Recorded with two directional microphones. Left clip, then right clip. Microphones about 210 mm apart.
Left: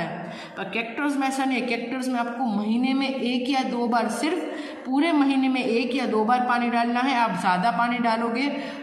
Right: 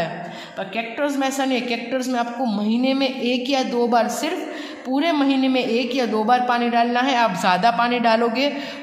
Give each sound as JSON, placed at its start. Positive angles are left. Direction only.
{"t": 0.7, "sound": "a woman's voice", "side_deg": -35}